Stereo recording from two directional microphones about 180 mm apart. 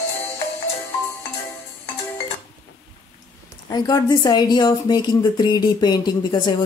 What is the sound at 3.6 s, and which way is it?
Speech, 20° left (ahead or behind).